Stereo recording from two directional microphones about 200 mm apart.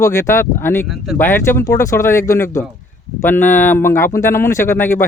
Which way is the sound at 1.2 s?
10° left (ahead or behind).